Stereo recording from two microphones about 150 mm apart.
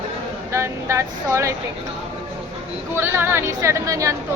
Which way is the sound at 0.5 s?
20° right (ahead or behind).